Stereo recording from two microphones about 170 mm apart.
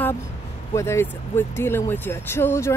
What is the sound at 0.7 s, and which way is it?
Speech, 15° left (ahead or behind).